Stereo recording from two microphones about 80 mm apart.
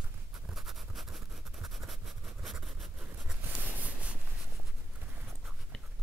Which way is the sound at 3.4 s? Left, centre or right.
Centre.